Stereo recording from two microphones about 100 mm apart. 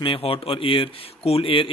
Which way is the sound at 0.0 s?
65° left (ahead or behind).